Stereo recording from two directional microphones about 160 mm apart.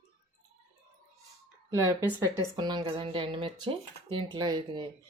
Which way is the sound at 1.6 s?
20° right (ahead or behind).